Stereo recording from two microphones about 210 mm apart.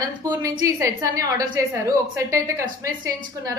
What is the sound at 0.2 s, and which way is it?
A woman's voice, 15° right (ahead or behind).